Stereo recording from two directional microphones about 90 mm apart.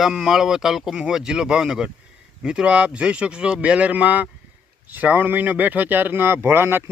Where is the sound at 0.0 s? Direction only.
5° right (ahead or behind).